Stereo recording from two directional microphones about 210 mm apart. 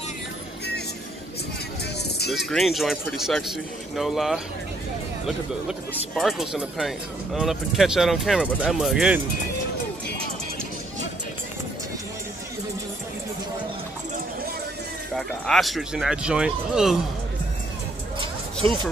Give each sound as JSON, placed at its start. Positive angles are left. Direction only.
{"t": 2.0, "sound": "music", "side_deg": 50}
{"t": 2.3, "sound": "speech", "side_deg": 0}
{"t": 15.1, "sound": "speech", "side_deg": 0}